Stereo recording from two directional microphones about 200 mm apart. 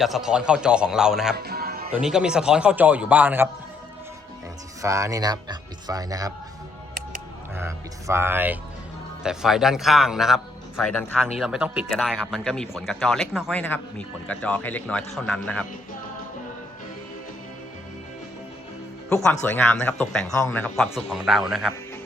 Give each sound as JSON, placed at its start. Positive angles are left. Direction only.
{"t": 0.0, "sound": "speech", "side_deg": 0}
{"t": 1.4, "sound": "music", "side_deg": -50}
{"t": 1.9, "sound": "speech", "side_deg": -5}
{"t": 4.8, "sound": "speech", "side_deg": -15}
{"t": 7.5, "sound": "a man's voice", "side_deg": -10}
{"t": 19.0, "sound": "a man's voice", "side_deg": 5}
{"t": 20.7, "sound": "speech", "side_deg": 0}